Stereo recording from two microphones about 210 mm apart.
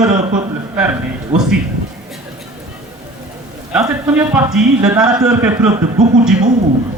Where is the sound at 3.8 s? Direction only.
15° right (ahead or behind).